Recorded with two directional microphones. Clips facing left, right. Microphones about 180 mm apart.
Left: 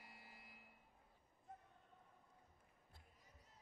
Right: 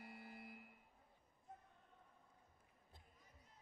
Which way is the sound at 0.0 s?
55° right (ahead or behind).